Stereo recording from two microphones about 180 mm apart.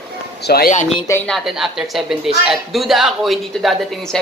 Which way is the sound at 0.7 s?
45° left (ahead or behind).